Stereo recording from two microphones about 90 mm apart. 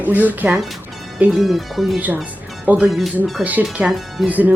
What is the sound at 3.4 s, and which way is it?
Speech, 15° right (ahead or behind).